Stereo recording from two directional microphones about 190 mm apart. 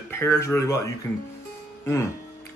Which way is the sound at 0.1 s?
15° left (ahead or behind).